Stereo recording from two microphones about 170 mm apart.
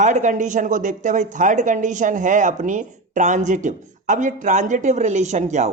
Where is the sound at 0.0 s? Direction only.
45° right (ahead or behind).